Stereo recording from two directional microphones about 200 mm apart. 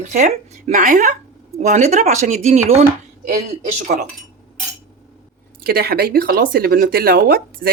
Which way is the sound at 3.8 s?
40° right (ahead or behind).